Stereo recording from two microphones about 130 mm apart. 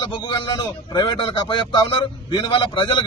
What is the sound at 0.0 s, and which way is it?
Speech, 35° left (ahead or behind).